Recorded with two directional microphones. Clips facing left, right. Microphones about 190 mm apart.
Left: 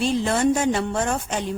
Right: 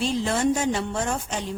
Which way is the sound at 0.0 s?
60° left (ahead or behind).